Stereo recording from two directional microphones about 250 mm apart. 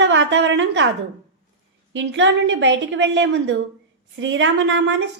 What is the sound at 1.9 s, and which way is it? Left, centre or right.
A woman's voice, right.